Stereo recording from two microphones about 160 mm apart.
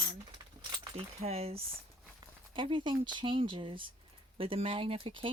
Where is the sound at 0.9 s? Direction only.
40° right (ahead or behind).